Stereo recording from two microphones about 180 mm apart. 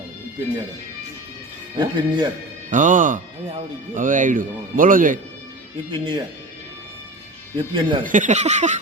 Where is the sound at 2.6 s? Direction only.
45° right (ahead or behind).